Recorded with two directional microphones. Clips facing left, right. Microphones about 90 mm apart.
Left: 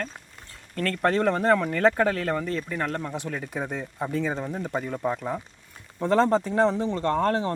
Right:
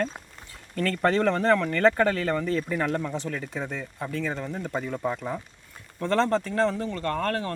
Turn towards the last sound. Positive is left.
turn(degrees=20)  # may be behind; listen again after turning